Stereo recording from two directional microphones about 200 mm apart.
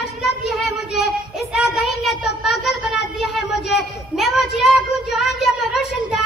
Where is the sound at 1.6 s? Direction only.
5° right (ahead or behind).